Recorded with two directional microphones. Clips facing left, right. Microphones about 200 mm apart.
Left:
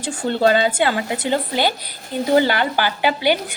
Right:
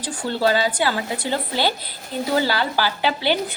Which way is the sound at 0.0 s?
25° left (ahead or behind).